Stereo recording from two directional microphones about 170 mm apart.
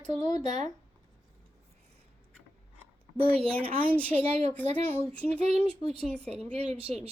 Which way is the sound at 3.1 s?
35° right (ahead or behind).